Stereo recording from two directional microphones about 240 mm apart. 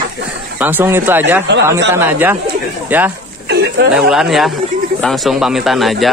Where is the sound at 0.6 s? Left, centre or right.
Centre.